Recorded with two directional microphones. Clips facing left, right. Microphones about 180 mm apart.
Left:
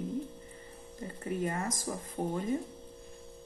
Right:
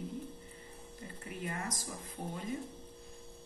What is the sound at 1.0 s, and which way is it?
Speech, 45° left (ahead or behind).